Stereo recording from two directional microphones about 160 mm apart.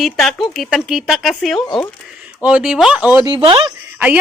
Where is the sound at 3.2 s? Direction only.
30° right (ahead or behind).